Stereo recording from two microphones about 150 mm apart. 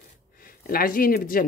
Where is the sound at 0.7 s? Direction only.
75° left (ahead or behind).